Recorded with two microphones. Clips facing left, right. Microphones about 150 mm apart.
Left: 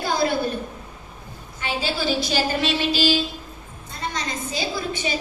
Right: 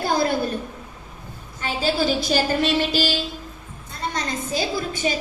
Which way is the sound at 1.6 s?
45° right (ahead or behind).